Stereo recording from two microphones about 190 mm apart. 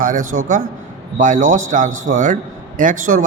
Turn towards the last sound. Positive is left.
turn(degrees=-45)  # may be behind; listen again after turning